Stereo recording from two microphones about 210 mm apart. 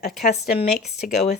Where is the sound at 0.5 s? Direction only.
30° left (ahead or behind).